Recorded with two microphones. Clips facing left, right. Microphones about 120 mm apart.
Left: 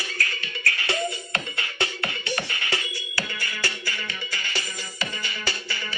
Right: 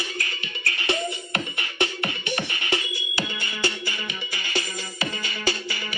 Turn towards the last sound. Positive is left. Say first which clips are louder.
# right 4 dB
turn(degrees=-15)  # may be behind; listen again after turning